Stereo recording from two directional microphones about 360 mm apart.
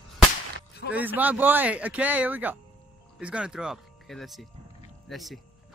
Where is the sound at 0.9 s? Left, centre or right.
Centre.